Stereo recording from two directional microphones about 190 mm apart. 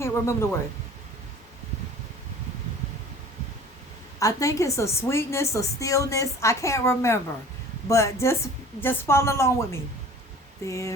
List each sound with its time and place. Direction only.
0.0 s speech: 15° left (ahead or behind)
4.2 s a woman's voice: 15° left (ahead or behind)